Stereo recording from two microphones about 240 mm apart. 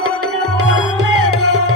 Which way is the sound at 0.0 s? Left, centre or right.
Right.